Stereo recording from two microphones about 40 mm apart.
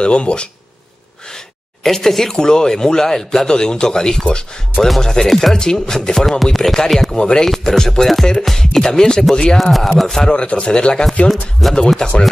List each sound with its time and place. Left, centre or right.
0.0 s speech: left
1.8 s speech: centre
2.3 s speech: centre
4.7 s chopping: centre
5.0 s speech: centre
6.4 s chopping: centre
7.2 s speech: left
7.4 s speech: centre
9.6 s chopping: centre
10.0 s speech: centre
10.3 s speech: left
11.6 s chopping: centre
12.0 s speech: centre